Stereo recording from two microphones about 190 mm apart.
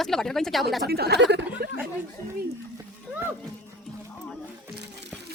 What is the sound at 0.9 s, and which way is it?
Speech, 55° right (ahead or behind).